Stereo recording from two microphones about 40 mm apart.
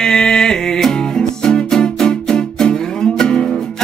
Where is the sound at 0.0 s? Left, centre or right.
Centre.